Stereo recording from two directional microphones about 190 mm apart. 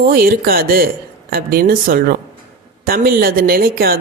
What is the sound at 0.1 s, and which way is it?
Speech, 50° right (ahead or behind).